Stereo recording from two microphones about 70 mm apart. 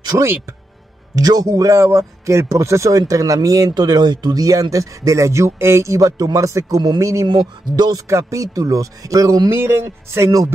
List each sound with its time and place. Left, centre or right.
0.1 s speech: right
1.1 s a man's voice: right
7.2 s speech: right
8.1 s speech: right
9.5 s speech: right
9.8 s a man's voice: right